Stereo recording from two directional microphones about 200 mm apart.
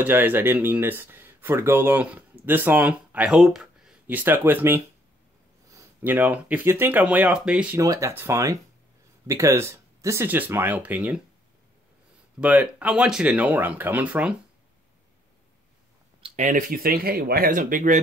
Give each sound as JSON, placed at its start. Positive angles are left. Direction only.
{"t": 0.0, "sound": "speech", "side_deg": -10}
{"t": 12.4, "sound": "speech", "side_deg": -5}
{"t": 16.2, "sound": "speech", "side_deg": -35}